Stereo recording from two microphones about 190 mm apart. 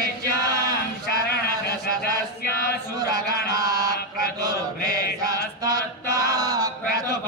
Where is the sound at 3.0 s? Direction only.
20° right (ahead or behind).